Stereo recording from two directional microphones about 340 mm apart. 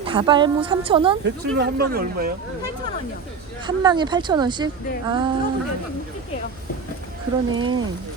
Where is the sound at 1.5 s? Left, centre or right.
Right.